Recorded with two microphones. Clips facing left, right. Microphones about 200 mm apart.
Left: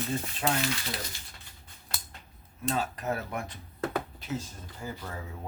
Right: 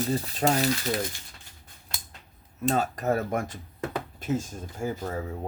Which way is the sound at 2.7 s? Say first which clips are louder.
Right 6 dB; 45° right (ahead or behind).